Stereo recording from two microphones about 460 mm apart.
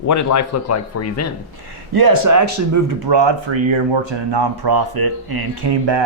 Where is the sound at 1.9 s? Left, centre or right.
Right.